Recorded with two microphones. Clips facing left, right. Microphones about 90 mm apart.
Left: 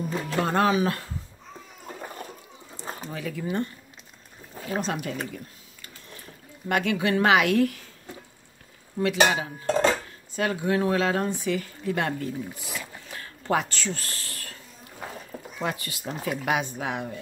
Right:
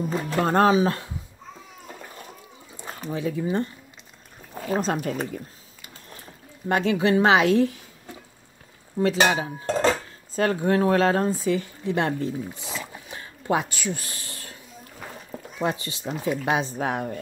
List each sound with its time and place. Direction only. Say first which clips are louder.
0.4 s speech: right 4 dB; 35° right (ahead or behind)
3.1 s a woman's voice: right 6 dB; 25° right (ahead or behind)
4.6 s speech: right 4 dB; 40° right (ahead or behind)
6.7 s a woman's voice: right 3 dB; 30° right (ahead or behind)
9.0 s speech: right 2 dB; 30° right (ahead or behind)
11.4 s a sound: right 3 dB; 25° right (ahead or behind)
15.6 s a woman's voice: right 4 dB; 25° right (ahead or behind)
16.8 s speech: right 4 dB; 40° right (ahead or behind)